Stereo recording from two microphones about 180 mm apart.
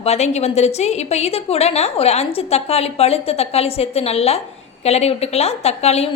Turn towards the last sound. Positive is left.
turn(degrees=35)  # may be behind; listen again after turning